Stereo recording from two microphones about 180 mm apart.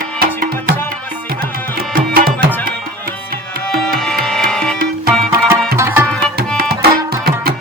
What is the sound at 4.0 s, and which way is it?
Tabla, 5° left (ahead or behind).